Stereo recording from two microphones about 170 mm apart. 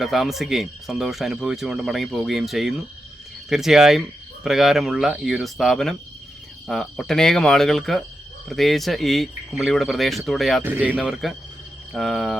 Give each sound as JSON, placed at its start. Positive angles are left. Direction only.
{"t": 0.0, "sound": "speech", "side_deg": 0}
{"t": 10.6, "sound": "speech", "side_deg": -10}